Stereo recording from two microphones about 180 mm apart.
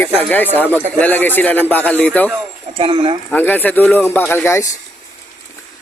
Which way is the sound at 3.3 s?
10° left (ahead or behind).